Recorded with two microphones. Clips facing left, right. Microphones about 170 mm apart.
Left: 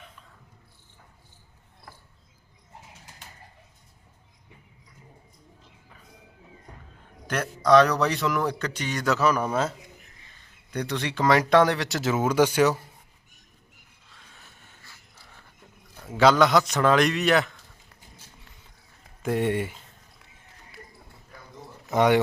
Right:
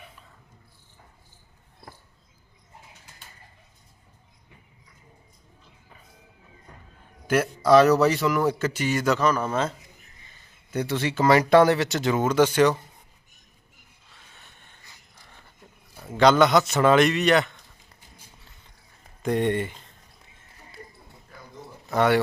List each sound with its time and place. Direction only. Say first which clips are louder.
7.5 s a man's voice: right 1 dB; 5° right (ahead or behind)
10.7 s a man's voice: right 3 dB; 5° right (ahead or behind)
14.1 s a sound: even; centre (ahead or behind)
16.1 s a man's voice: right 1 dB; centre (ahead or behind)
19.2 s speech: right 1 dB; 5° left (ahead or behind)
21.9 s speech: left 1 dB; 15° left (ahead or behind)